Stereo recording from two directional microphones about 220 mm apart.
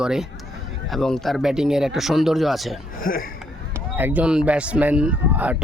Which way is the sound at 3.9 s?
10° right (ahead or behind).